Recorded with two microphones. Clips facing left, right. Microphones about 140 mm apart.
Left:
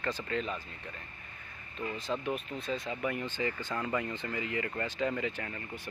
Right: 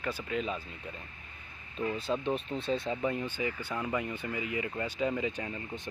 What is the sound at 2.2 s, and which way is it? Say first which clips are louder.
Speech: right 3 dB; 30° right (ahead or behind).